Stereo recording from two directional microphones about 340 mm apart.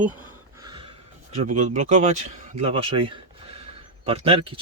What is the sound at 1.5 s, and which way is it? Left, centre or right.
Speech, right.